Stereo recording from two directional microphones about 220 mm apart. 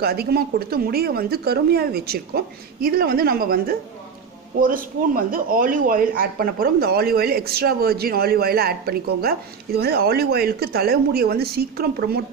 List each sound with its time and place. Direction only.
0.0 s speech: 45° right (ahead or behind)